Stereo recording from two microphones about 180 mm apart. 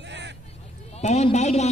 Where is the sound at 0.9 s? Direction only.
35° left (ahead or behind).